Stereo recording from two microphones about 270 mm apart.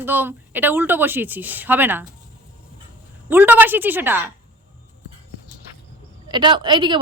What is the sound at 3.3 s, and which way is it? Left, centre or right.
Speech, centre.